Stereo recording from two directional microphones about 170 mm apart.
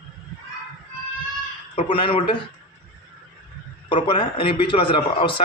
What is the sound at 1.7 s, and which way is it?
Speech, 30° left (ahead or behind).